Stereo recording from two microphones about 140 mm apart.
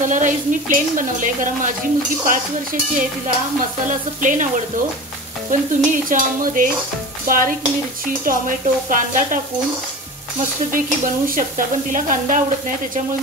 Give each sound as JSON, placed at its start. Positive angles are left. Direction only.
{"t": 0.0, "sound": "stir", "side_deg": -65}
{"t": 4.2, "sound": "stir", "side_deg": -65}
{"t": 5.5, "sound": "stir", "side_deg": -70}
{"t": 11.2, "sound": "stir", "side_deg": -70}